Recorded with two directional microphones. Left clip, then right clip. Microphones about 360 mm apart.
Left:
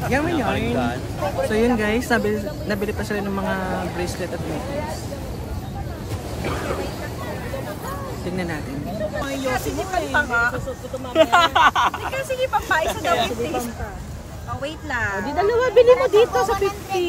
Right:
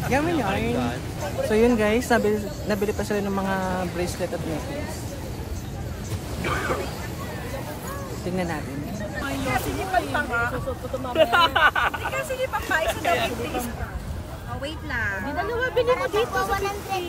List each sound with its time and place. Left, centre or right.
0.1 s speech: centre
1.5 s speech: centre
9.5 s speech: centre
11.1 s speech: centre
12.7 s speech: centre
14.6 s speech: centre
15.4 s speech: left
15.9 s speech: centre